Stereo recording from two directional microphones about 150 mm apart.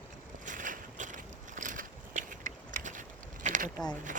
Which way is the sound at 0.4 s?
60° right (ahead or behind).